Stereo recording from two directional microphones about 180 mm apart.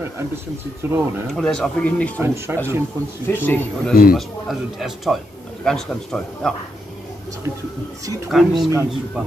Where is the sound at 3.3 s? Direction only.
10° left (ahead or behind).